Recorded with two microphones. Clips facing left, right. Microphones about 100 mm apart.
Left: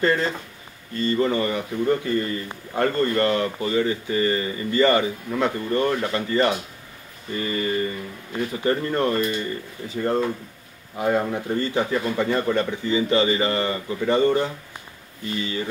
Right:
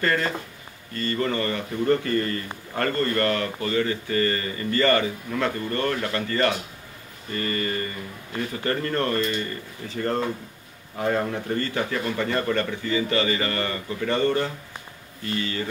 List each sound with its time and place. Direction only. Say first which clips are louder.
0.0 s speech: left 3 dB; 20° left (ahead or behind)